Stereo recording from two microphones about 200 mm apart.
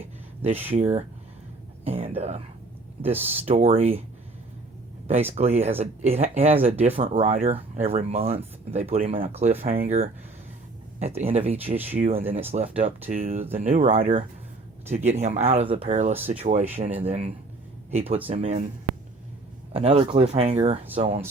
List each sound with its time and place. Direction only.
0.4 s speech: 30° right (ahead or behind)
1.8 s whispering: 30° right (ahead or behind)
3.0 s speech: 30° right (ahead or behind)
5.3 s speech: 30° right (ahead or behind)
9.6 s speech: 40° right (ahead or behind)
19.7 s speech: 30° right (ahead or behind)